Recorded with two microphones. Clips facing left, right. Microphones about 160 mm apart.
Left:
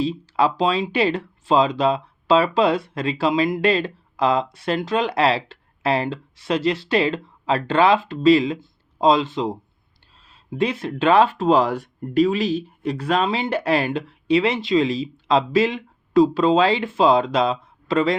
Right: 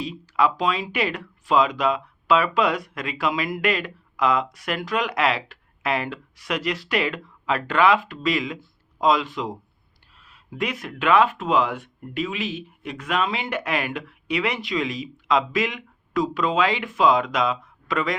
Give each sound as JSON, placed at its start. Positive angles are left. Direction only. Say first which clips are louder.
{"t": 0.0, "sound": "speech", "louder": "left 3 dB", "side_deg": 30}